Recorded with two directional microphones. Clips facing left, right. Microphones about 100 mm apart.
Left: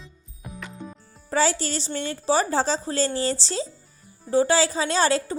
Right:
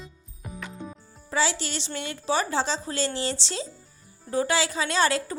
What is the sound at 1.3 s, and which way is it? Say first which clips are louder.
A woman's voice: left 4 dB; 45° left (ahead or behind).